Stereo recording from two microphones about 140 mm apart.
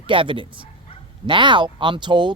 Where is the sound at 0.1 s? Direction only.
40° right (ahead or behind).